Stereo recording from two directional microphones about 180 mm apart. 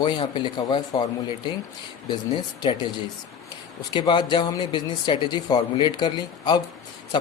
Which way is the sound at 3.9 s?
25° left (ahead or behind).